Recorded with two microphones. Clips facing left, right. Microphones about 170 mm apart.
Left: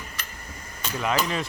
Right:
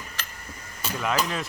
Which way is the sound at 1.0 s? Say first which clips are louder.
Left 1 dB; centre (ahead or behind).